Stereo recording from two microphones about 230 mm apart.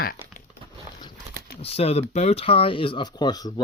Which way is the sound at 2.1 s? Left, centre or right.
Left.